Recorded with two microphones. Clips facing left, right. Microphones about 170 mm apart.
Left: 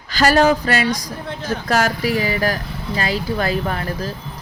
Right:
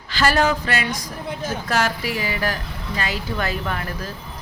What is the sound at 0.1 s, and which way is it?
Speech, 40° left (ahead or behind).